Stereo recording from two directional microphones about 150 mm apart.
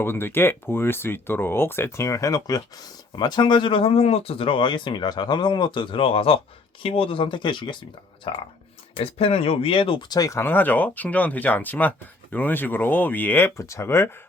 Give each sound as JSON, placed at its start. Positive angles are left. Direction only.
{"t": 0.0, "sound": "speech", "side_deg": 15}
{"t": 10.2, "sound": "speech", "side_deg": 20}